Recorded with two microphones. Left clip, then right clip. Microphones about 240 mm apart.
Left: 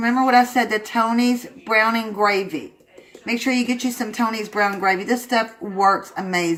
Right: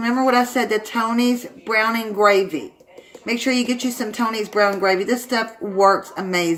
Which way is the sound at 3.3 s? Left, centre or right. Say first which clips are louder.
Right 1 dB; left.